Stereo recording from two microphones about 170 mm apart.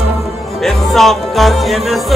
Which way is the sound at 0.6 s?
Centre (ahead or behind).